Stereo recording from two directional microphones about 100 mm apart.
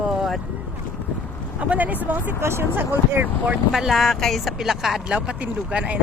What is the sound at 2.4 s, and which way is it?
Speech, 25° right (ahead or behind).